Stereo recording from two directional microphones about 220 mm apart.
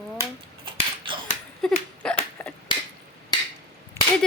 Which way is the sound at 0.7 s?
20° right (ahead or behind).